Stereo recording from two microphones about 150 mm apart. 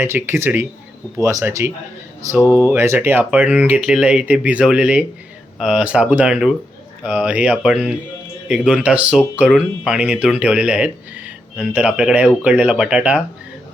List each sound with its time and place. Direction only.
0.0 s speech: 15° right (ahead or behind)